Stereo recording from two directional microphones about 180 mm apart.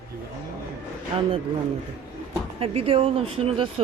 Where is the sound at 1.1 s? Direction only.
30° right (ahead or behind).